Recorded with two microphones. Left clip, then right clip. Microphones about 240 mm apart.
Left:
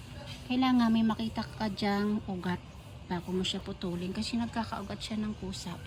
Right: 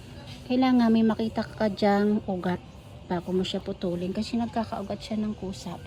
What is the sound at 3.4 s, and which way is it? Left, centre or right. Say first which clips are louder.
Speech: right 5 dB; centre.